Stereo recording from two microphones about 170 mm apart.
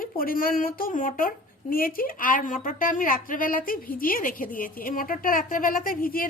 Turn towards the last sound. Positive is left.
turn(degrees=55)  # may be behind; listen again after turning